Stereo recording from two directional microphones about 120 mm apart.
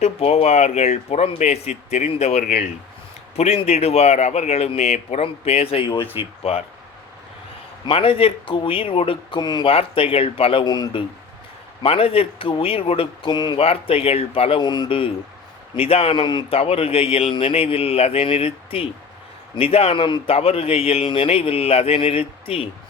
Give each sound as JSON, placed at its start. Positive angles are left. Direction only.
{"t": 0.0, "sound": "a man's voice", "side_deg": 60}
{"t": 7.9, "sound": "a man's voice", "side_deg": 50}
{"t": 9.4, "sound": "speech", "side_deg": 35}
{"t": 9.6, "sound": "a man's voice", "side_deg": 50}
{"t": 10.7, "sound": "speech", "side_deg": 35}
{"t": 11.8, "sound": "a man's voice", "side_deg": 55}
{"t": 13.6, "sound": "a man's voice", "side_deg": 55}
{"t": 14.6, "sound": "a man's voice", "side_deg": 35}
{"t": 16.2, "sound": "speech", "side_deg": 40}
{"t": 16.6, "sound": "a man's voice", "side_deg": 55}
{"t": 20.3, "sound": "a man's voice", "side_deg": 55}